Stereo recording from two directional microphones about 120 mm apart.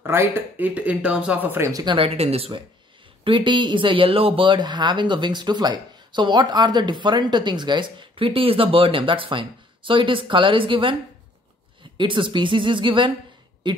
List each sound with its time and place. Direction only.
0.0 s speech: 20° right (ahead or behind)
1.7 s speech: 30° right (ahead or behind)
2.0 s speech: 55° right (ahead or behind)
3.3 s speech: 40° right (ahead or behind)
12.0 s speech: 45° right (ahead or behind)